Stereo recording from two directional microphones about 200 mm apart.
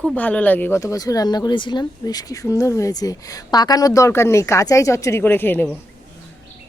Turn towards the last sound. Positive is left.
turn(degrees=10)  # may be behind; listen again after turning